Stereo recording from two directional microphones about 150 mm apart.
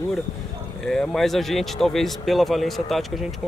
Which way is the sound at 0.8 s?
5° left (ahead or behind).